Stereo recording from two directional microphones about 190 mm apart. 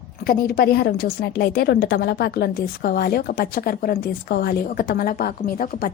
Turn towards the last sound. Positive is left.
turn(degrees=50)  # may be behind; listen again after turning